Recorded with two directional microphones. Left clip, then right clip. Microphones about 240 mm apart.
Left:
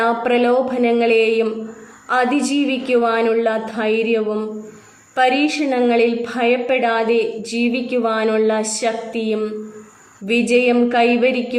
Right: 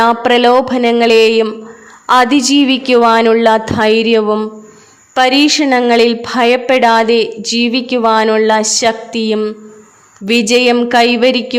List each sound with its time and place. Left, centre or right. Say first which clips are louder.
0.0 s a woman's voice: right 7 dB; right